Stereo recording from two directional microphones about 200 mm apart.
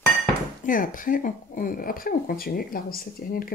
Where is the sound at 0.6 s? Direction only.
45° left (ahead or behind).